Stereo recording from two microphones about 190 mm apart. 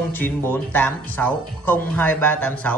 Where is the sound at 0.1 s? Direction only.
10° left (ahead or behind).